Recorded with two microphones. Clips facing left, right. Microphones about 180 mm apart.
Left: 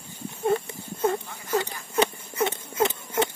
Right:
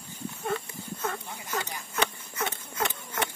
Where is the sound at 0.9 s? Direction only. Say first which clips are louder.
Left 10 dB; 30° left (ahead or behind).